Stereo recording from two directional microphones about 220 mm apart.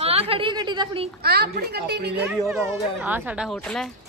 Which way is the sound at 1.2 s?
45° right (ahead or behind).